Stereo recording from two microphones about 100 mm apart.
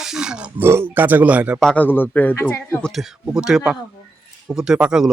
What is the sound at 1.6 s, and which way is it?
Speech, 15° left (ahead or behind).